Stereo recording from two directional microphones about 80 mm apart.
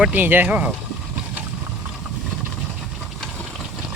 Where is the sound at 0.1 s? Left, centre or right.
Right.